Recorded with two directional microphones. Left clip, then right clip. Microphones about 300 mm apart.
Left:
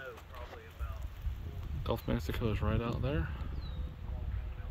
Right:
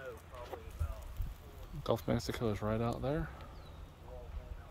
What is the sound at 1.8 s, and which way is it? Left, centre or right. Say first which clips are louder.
Speech: right 2 dB; centre.